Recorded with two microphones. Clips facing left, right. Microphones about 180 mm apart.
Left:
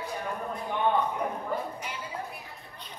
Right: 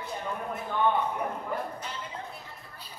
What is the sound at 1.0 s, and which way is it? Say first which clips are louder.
Speech: left 1 dB; 10° right (ahead or behind).